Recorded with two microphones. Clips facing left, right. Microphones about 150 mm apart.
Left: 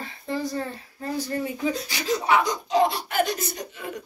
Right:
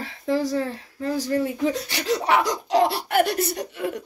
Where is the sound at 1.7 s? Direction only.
70° right (ahead or behind).